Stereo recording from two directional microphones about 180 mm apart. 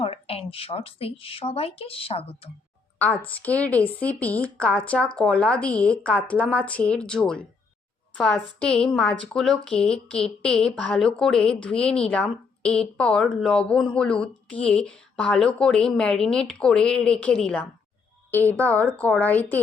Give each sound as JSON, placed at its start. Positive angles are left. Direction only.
{"t": 0.0, "sound": "speech", "side_deg": 30}
{"t": 3.2, "sound": "a woman's voice", "side_deg": 10}